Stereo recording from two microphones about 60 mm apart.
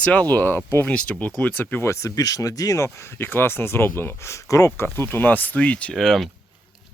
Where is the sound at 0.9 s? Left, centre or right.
Left.